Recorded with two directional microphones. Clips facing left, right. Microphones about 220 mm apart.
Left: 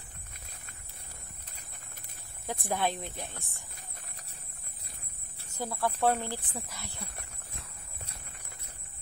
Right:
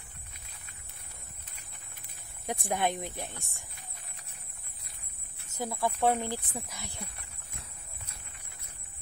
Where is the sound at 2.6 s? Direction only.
15° right (ahead or behind).